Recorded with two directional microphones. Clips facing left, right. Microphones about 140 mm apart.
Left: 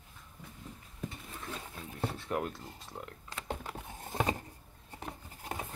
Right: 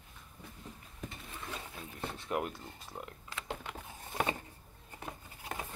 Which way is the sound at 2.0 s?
5° left (ahead or behind).